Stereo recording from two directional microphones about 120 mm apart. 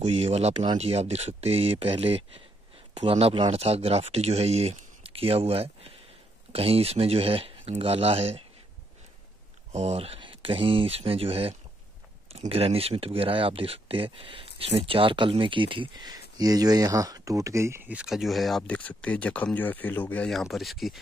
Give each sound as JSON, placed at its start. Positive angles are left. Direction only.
{"t": 0.0, "sound": "speech", "side_deg": -60}
{"t": 9.7, "sound": "speech", "side_deg": -70}
{"t": 17.9, "sound": "speech", "side_deg": -5}
{"t": 20.2, "sound": "speech", "side_deg": 0}